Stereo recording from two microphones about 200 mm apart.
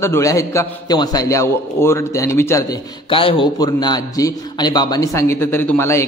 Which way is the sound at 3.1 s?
25° left (ahead or behind).